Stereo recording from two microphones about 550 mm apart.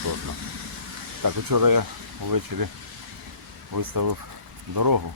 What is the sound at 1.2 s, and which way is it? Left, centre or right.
Speech, right.